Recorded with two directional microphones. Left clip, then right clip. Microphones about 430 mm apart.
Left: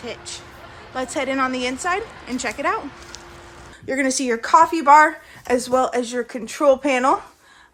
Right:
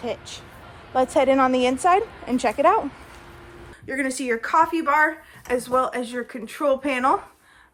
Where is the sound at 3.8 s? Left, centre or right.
Centre.